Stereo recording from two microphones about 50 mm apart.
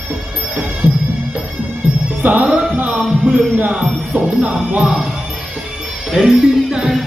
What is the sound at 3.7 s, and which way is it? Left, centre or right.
Music, centre.